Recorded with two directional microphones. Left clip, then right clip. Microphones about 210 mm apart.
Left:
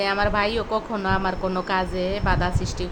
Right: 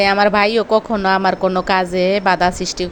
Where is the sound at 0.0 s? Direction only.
35° right (ahead or behind).